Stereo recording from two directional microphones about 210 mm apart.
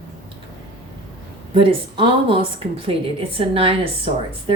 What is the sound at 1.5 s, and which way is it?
A woman's voice, 25° right (ahead or behind).